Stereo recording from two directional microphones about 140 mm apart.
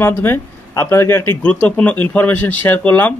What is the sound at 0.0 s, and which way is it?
Speech, 15° left (ahead or behind).